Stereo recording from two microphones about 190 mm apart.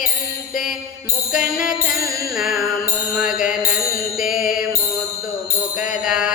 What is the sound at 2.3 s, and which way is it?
Music, centre (ahead or behind).